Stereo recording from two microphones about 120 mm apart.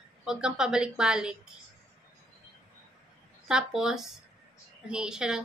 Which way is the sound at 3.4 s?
5° right (ahead or behind).